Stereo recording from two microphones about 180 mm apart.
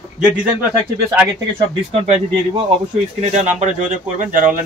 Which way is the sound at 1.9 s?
35° right (ahead or behind).